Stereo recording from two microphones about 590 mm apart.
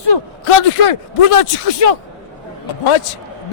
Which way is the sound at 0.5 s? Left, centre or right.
Left.